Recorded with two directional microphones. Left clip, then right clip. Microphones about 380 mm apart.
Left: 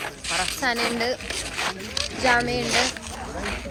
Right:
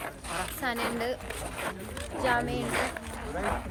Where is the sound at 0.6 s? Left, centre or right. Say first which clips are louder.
Left 5 dB; centre.